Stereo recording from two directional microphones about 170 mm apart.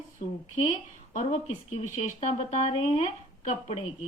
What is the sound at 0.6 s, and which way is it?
Speech, 45° left (ahead or behind).